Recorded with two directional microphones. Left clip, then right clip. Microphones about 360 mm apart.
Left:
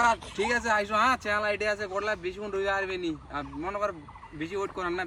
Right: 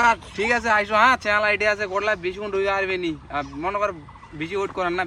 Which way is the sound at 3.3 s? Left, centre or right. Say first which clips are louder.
Right 8 dB; centre.